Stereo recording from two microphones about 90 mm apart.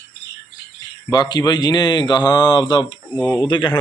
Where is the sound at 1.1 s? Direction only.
55° left (ahead or behind).